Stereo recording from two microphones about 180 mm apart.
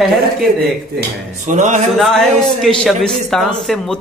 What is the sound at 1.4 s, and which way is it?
Speech, 40° right (ahead or behind).